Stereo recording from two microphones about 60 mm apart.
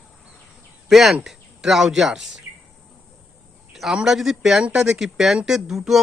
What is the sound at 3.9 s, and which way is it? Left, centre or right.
Speech, centre.